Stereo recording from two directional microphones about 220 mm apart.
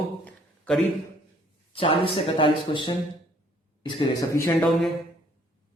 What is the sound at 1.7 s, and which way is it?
Speech, 25° left (ahead or behind).